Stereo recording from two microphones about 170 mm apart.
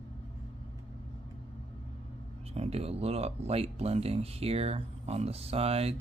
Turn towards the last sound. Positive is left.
turn(degrees=-35)  # may be behind; listen again after turning